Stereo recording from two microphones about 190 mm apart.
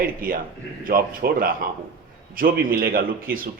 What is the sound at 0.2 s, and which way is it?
A man's voice, 50° right (ahead or behind).